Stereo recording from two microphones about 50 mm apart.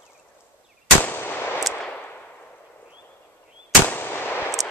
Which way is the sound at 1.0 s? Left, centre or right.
Left.